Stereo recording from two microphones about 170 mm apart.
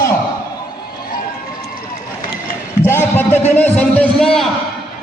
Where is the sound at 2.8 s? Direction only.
15° left (ahead or behind).